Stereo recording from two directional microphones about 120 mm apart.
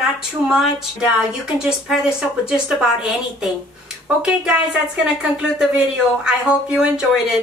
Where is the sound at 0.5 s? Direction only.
5° right (ahead or behind).